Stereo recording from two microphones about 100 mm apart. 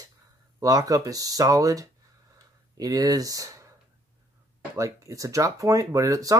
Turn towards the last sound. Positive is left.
turn(degrees=-35)  # may be behind; listen again after turning